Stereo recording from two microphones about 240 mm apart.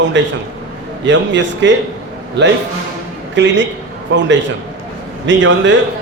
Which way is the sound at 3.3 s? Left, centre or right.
Right.